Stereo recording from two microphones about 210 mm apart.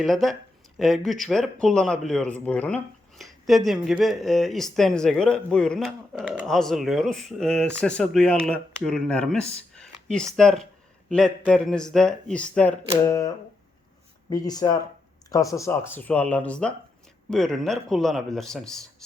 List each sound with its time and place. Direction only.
0.0 s speech: centre (ahead or behind)
9.7 s a sound: 5° left (ahead or behind)
10.3 s speech: centre (ahead or behind)